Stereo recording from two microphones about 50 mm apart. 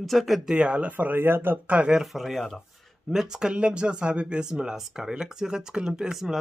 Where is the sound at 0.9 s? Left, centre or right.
Right.